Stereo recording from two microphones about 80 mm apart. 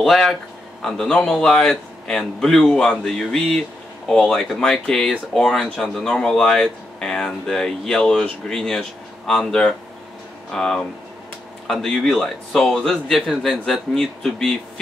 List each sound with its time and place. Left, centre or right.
0.0 s a man's voice: centre